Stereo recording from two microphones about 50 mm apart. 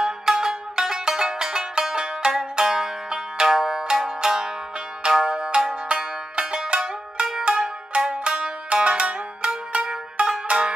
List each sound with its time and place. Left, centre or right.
0.0 s music: centre